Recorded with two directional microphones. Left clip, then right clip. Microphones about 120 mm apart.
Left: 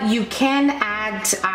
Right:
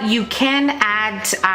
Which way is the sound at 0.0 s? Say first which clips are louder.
Right 2 dB; 40° right (ahead or behind).